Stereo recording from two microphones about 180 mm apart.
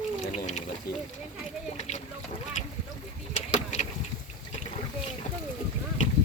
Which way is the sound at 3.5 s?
40° left (ahead or behind).